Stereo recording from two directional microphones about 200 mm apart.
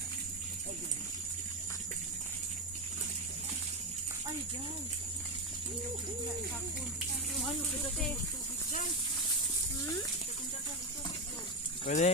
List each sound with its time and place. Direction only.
11.9 s speech: 35° left (ahead or behind)